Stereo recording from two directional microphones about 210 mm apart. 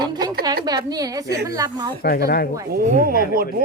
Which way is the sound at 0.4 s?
20° right (ahead or behind).